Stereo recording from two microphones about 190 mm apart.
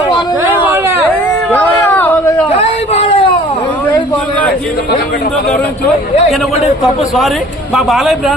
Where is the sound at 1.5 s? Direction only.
10° left (ahead or behind).